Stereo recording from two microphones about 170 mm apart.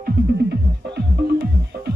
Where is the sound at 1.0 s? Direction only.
75° right (ahead or behind).